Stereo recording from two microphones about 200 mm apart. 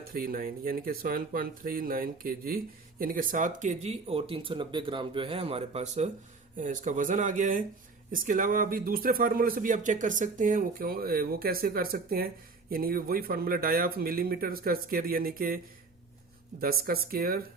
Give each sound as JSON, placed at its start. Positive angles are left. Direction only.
{"t": 0.0, "sound": "speech", "side_deg": -45}